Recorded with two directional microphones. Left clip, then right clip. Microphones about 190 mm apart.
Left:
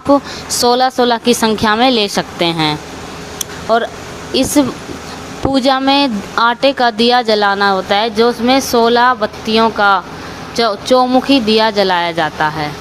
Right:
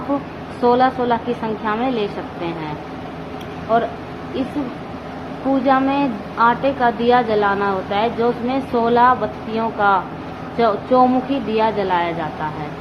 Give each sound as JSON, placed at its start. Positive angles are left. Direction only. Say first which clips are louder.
{"t": 0.6, "sound": "a woman's voice", "louder": "left 4 dB", "side_deg": 50}
{"t": 3.7, "sound": "a woman's voice", "louder": "left 4 dB", "side_deg": 50}
{"t": 5.6, "sound": "a woman's voice", "louder": "left 5 dB", "side_deg": 55}